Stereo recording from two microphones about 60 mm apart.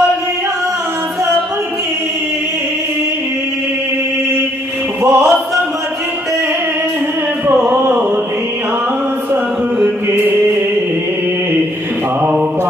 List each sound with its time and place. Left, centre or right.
5.0 s music: right
10.1 s chant: right